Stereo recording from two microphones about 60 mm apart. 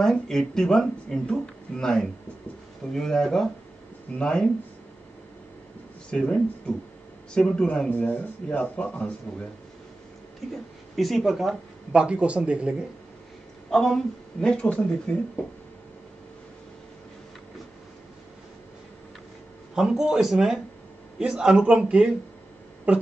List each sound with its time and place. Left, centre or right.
0.0 s speech: centre
6.0 s speech: centre
10.4 s speech: centre
11.9 s a man's voice: centre
13.7 s speech: centre
19.7 s a man's voice: centre